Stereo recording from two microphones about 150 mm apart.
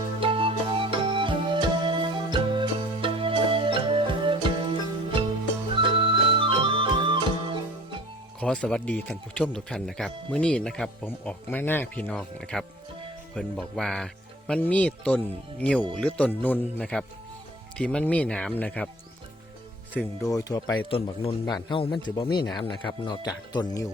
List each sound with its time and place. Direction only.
0.2 s music: 35° right (ahead or behind)
5.7 s music: 35° right (ahead or behind)
8.4 s speech: 5° left (ahead or behind)
20.2 s speech: 25° left (ahead or behind)
20.9 s speech: 40° left (ahead or behind)